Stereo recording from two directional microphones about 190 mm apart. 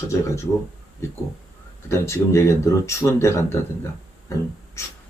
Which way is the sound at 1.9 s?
15° left (ahead or behind).